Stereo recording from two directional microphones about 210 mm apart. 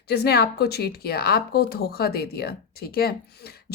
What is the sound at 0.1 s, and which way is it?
A woman's voice, 50° left (ahead or behind).